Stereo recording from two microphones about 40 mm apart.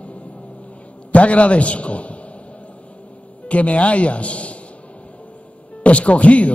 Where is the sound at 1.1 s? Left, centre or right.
Left.